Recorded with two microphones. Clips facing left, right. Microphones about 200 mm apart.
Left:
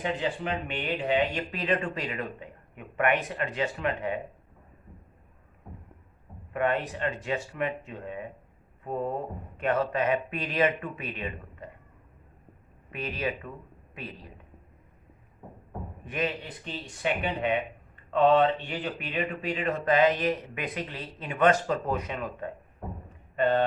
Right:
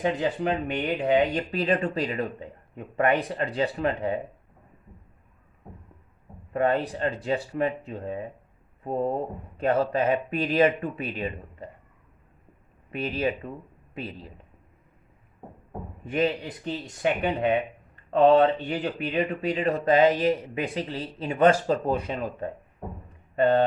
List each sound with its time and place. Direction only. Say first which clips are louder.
0.0 s speech: right 5 dB; 40° right (ahead or behind)
6.5 s speech: right 4 dB; 35° right (ahead or behind)
12.9 s speech: right 5 dB; 30° right (ahead or behind)
16.0 s speech: right 6 dB; 30° right (ahead or behind)